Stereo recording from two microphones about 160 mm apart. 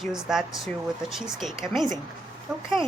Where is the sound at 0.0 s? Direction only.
5° right (ahead or behind).